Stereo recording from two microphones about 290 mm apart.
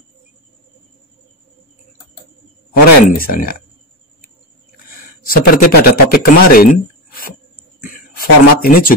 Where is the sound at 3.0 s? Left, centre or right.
Left.